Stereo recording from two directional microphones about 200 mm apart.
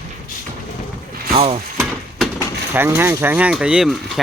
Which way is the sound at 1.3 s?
30° right (ahead or behind).